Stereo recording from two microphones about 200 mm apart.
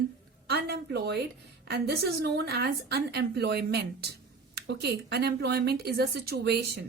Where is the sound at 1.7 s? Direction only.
55° right (ahead or behind).